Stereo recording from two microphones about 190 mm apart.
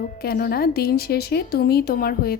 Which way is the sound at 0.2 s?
55° left (ahead or behind).